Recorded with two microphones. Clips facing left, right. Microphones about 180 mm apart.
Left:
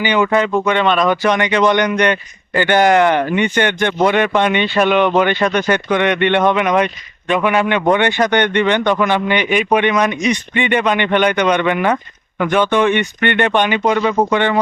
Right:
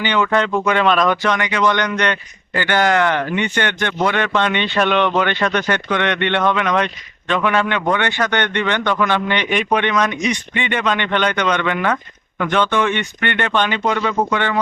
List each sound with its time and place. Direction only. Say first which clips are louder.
0.0 s speech: left 3 dB; 10° left (ahead or behind)
1.2 s speech: left 4 dB; 20° left (ahead or behind)